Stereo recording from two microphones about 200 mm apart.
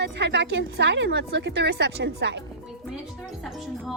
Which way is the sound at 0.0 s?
60° right (ahead or behind).